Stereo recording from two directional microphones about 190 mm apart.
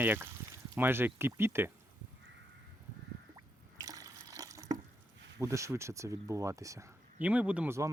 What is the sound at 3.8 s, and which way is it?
Water, 20° right (ahead or behind).